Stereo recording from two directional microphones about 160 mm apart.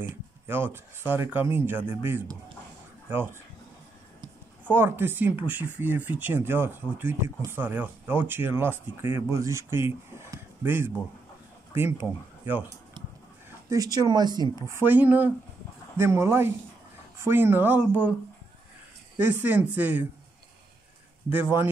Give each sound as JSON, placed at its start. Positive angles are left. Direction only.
{"t": 0.1, "sound": "speech", "side_deg": -15}
{"t": 4.6, "sound": "speech", "side_deg": -15}
{"t": 14.7, "sound": "speech", "side_deg": -15}
{"t": 19.1, "sound": "speech", "side_deg": -10}
{"t": 21.3, "sound": "speech", "side_deg": -10}